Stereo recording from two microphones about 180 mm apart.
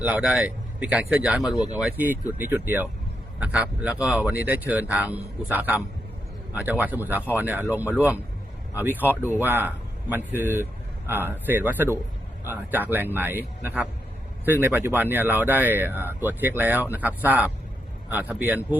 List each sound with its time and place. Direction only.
0.0 s speech: 5° right (ahead or behind)
1.5 s speech: 25° left (ahead or behind)
1.8 s a man's voice: 10° right (ahead or behind)